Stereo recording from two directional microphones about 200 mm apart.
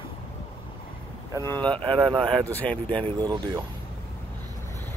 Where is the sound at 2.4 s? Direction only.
5° left (ahead or behind).